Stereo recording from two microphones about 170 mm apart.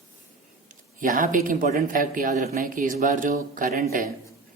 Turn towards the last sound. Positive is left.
turn(degrees=-55)  # may be behind; listen again after turning